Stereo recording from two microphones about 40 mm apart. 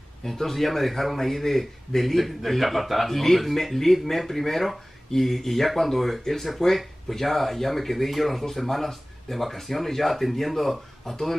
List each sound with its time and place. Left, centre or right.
0.2 s a man's voice: centre